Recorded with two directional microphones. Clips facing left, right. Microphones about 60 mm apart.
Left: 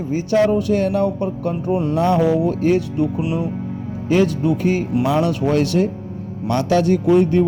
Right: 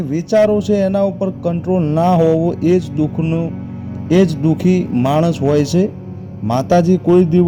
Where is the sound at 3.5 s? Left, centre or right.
Centre.